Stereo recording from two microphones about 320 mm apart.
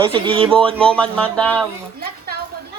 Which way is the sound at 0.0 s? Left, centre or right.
Centre.